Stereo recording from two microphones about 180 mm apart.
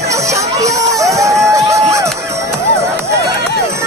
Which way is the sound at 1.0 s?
15° right (ahead or behind).